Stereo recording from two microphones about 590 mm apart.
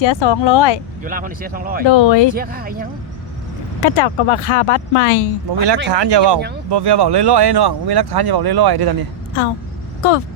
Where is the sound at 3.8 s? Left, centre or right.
Left.